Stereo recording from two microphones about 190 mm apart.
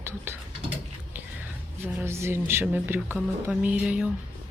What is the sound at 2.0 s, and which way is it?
Speech, 15° right (ahead or behind).